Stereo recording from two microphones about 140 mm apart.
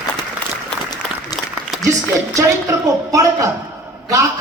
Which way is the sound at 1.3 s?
25° left (ahead or behind).